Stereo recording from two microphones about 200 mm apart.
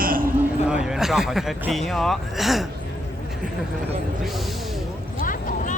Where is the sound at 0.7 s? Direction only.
5° right (ahead or behind).